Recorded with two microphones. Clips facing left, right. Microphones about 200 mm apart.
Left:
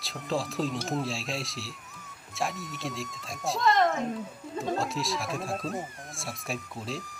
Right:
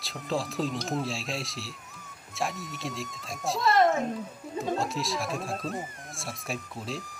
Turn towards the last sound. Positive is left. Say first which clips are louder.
# even
turn(degrees=0)  # may be behind; listen again after turning